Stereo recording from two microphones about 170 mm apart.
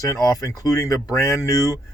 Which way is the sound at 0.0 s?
20° left (ahead or behind).